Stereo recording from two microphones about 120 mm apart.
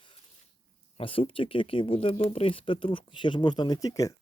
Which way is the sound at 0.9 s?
50° left (ahead or behind).